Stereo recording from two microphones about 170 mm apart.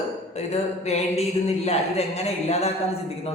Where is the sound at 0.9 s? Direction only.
40° left (ahead or behind).